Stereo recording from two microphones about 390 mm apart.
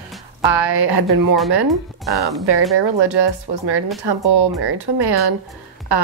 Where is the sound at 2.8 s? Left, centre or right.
Right.